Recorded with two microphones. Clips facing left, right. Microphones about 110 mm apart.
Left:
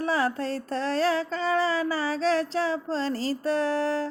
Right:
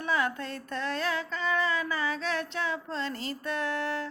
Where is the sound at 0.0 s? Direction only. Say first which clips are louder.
Left 4 dB; 35° left (ahead or behind).